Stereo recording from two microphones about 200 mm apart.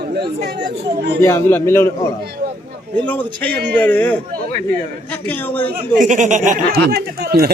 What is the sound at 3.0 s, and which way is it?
Speech, 10° left (ahead or behind).